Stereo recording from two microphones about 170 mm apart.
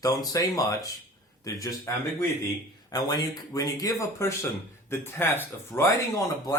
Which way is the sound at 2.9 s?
20° left (ahead or behind).